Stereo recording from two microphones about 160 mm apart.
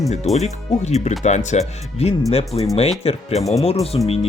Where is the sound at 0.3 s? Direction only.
45° left (ahead or behind).